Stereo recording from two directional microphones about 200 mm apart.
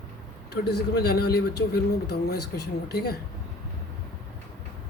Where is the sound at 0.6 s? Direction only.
50° left (ahead or behind).